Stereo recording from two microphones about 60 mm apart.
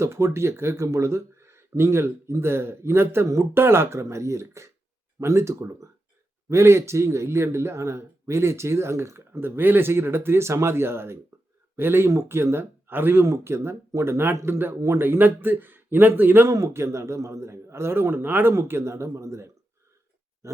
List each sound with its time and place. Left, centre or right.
0.0 s speech: right
16.5 s speech: right
18.5 s speech: right
20.4 s a sound: right